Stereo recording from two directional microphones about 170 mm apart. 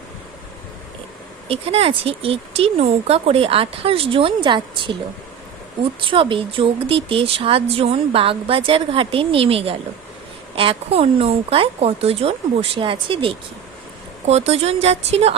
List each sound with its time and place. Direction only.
1.5 s speech: 35° right (ahead or behind)
6.0 s speech: 30° right (ahead or behind)